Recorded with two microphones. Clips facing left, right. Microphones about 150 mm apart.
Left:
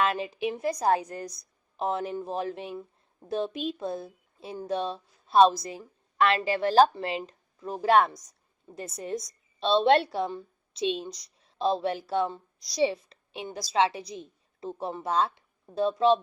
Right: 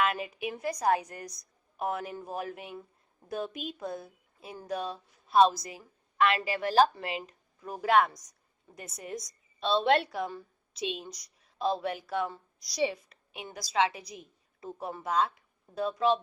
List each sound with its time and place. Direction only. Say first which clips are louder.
0.0 s a woman's voice: left 3 dB; 30° left (ahead or behind)